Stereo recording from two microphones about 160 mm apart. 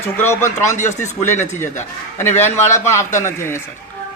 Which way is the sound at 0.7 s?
50° left (ahead or behind).